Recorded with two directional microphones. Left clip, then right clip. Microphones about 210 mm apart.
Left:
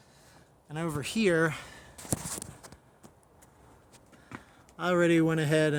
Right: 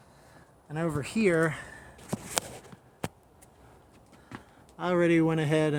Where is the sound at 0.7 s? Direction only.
Centre (ahead or behind).